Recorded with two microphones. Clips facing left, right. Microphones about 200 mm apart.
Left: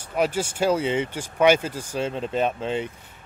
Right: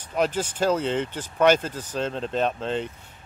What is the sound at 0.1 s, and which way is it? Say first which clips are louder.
Speech: left 1 dB; 10° left (ahead or behind).